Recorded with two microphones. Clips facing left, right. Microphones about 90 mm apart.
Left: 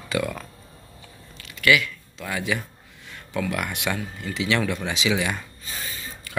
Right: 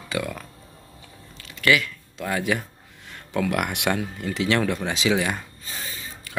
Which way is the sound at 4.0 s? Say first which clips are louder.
Right 3 dB; 50° right (ahead or behind).